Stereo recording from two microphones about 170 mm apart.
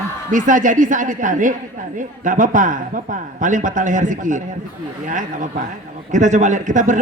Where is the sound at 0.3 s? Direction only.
50° right (ahead or behind).